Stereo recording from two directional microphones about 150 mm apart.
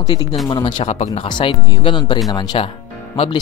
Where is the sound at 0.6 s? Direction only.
45° left (ahead or behind).